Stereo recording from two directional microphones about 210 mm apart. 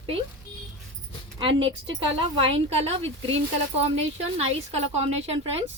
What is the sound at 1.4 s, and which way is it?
A woman's voice, 25° right (ahead or behind).